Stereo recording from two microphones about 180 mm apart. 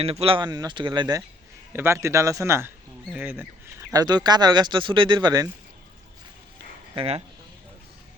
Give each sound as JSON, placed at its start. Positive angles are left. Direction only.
{"t": 0.0, "sound": "a man's voice", "side_deg": -35}
{"t": 3.9, "sound": "speech", "side_deg": -20}
{"t": 6.9, "sound": "speech", "side_deg": -30}